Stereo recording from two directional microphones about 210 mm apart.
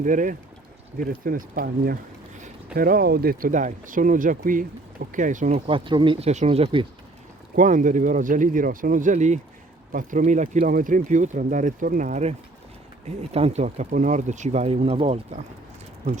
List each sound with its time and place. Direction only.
0.0 s speech: 40° right (ahead or behind)
7.5 s speech: 40° right (ahead or behind)